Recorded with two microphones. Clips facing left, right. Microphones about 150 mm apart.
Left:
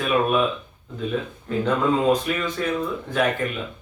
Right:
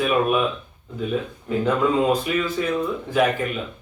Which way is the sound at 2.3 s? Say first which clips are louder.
Right 3 dB; 5° right (ahead or behind).